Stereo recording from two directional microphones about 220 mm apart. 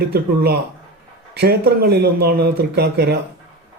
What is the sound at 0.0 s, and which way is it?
A man's voice, 45° right (ahead or behind).